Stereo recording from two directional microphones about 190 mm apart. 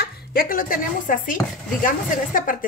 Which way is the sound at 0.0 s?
50° left (ahead or behind).